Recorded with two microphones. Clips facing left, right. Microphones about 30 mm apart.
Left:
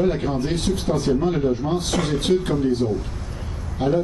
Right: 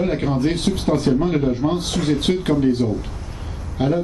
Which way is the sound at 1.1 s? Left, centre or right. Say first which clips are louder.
Left 1 dB; centre.